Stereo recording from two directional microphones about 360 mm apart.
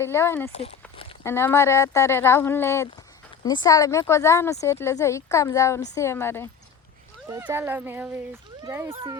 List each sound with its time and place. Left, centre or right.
0.0 s speech: centre
7.3 s a child's voice: centre